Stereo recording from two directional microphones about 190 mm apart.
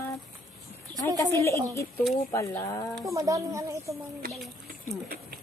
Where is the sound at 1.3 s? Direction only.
15° left (ahead or behind).